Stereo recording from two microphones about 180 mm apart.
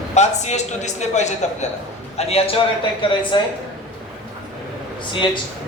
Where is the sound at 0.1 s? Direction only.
40° left (ahead or behind).